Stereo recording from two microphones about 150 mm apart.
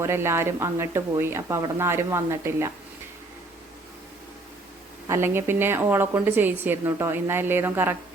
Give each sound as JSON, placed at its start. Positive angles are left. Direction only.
{"t": 0.0, "sound": "a woman's voice", "side_deg": -15}
{"t": 5.0, "sound": "a woman's voice", "side_deg": -15}